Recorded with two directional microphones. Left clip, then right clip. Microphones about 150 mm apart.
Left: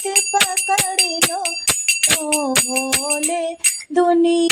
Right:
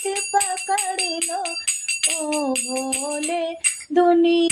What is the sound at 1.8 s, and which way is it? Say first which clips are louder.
Jingle bell: left 6 dB; 40° left (ahead or behind).